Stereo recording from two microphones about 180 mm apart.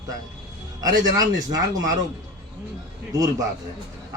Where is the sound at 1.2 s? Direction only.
20° right (ahead or behind).